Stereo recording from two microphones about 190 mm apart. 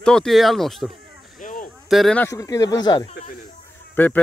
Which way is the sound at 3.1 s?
40° left (ahead or behind).